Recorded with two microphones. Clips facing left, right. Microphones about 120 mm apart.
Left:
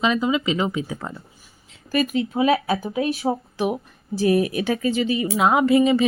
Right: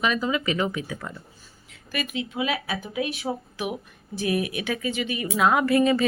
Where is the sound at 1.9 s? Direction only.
40° left (ahead or behind).